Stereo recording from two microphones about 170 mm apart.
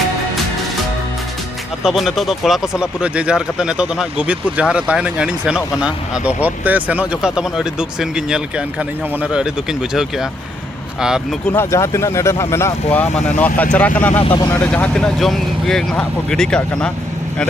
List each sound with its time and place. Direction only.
1.8 s speech: centre (ahead or behind)
11.4 s speech: 15° left (ahead or behind)
14.3 s speech: 25° left (ahead or behind)
14.7 s speech: 5° left (ahead or behind)